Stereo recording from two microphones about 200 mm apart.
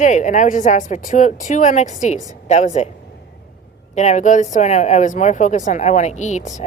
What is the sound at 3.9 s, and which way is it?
Speech, 35° left (ahead or behind).